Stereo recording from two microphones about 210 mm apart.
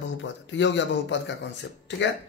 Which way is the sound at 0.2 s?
60° left (ahead or behind).